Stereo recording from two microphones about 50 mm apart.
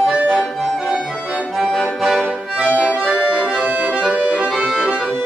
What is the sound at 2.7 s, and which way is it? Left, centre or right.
Accordion, right.